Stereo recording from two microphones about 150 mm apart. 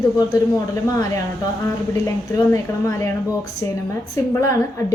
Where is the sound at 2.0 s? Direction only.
20° left (ahead or behind).